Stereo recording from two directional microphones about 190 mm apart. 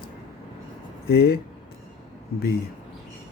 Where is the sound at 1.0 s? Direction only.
55° left (ahead or behind).